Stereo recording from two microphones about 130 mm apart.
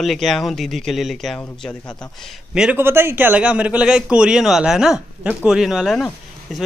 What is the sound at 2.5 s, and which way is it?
Speech, 5° right (ahead or behind).